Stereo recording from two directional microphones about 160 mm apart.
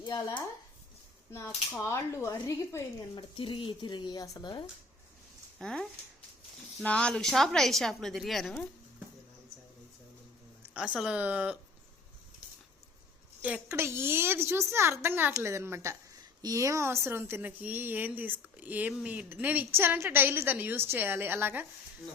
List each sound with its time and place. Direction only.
0.0 s a woman's voice: 25° left (ahead or behind)
3.2 s speech: 30° left (ahead or behind)
5.5 s a woman's voice: 5° left (ahead or behind)
10.8 s speech: 5° right (ahead or behind)
13.4 s speech: 10° right (ahead or behind)